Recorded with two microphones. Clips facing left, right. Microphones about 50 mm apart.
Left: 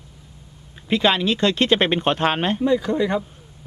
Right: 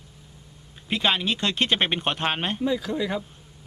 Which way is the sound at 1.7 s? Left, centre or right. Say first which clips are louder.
Left 6 dB; left.